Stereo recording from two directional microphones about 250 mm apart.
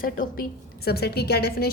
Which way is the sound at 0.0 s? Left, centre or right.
Left.